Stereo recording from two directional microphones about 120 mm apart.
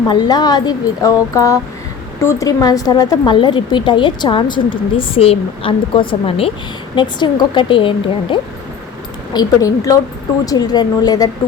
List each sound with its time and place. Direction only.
0.1 s speech: 35° left (ahead or behind); by 6.5 s 50° left (ahead or behind)
6.9 s speech: 40° left (ahead or behind)
9.3 s a woman's voice: 30° left (ahead or behind)